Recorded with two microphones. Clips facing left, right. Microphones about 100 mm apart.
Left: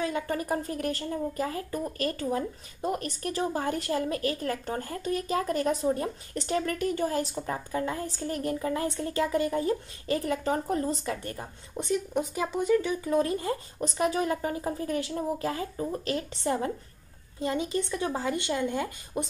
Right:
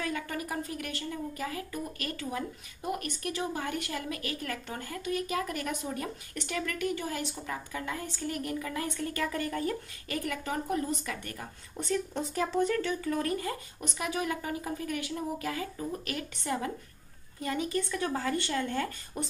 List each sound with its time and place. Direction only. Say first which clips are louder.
0.0 s speech: left 5 dB; 25° left (ahead or behind)
0.4 s a woman's voice: left 5 dB; 35° left (ahead or behind)
13.7 s a woman's voice: left 8 dB; 35° left (ahead or behind); by 19.2 s 15° left (ahead or behind)